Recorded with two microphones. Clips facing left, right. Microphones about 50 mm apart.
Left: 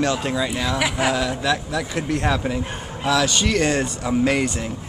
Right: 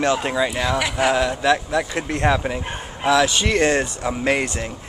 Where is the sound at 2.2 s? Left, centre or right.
Centre.